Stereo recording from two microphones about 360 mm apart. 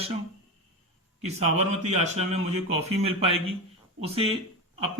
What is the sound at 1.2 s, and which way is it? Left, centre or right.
A man's voice, centre.